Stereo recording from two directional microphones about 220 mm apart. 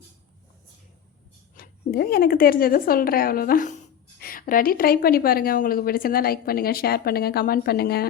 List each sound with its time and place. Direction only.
1.5 s speech: 45° left (ahead or behind)